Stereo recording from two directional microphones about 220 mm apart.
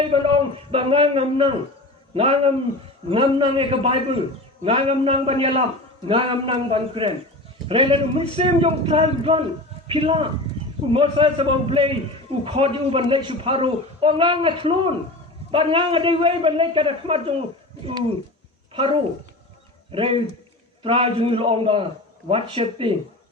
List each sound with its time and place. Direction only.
0.0 s a sound: 25° right (ahead or behind)
0.7 s a man's voice: 25° right (ahead or behind)
18.7 s a man's voice: 25° right (ahead or behind)